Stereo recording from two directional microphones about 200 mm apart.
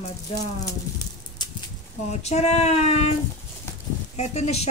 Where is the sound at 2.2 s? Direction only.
35° left (ahead or behind).